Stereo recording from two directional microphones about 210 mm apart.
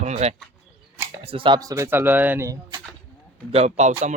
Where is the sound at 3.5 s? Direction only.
30° right (ahead or behind).